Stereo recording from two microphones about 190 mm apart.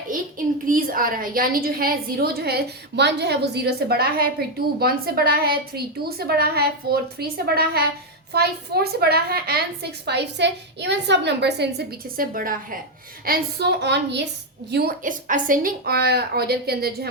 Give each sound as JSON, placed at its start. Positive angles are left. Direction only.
{"t": 0.1, "sound": "a woman's voice", "side_deg": -45}
{"t": 14.7, "sound": "a woman's voice", "side_deg": -55}